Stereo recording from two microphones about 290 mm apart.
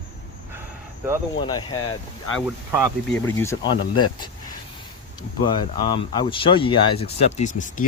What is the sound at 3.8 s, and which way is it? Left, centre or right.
Speech, left.